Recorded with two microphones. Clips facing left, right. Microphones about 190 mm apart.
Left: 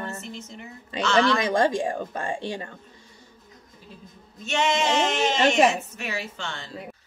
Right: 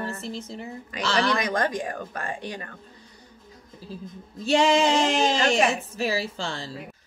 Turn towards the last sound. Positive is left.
turn(degrees=-35)  # may be behind; listen again after turning